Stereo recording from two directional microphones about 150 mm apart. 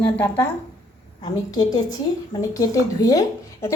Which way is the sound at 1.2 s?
25° left (ahead or behind).